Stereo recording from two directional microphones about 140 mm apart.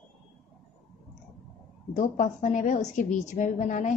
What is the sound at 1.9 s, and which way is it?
A woman's voice, 60° left (ahead or behind).